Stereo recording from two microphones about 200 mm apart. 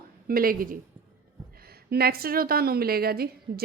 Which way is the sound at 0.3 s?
45° right (ahead or behind).